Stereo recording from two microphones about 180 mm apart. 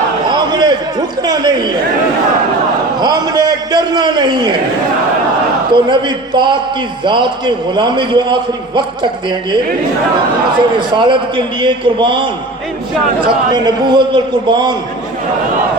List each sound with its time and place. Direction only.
0.3 s a sound: 25° right (ahead or behind)
3.0 s a man's voice: 20° right (ahead or behind)
5.7 s a man's voice: 25° right (ahead or behind)
10.8 s a man's voice: 25° right (ahead or behind)
13.2 s a man's voice: 25° right (ahead or behind)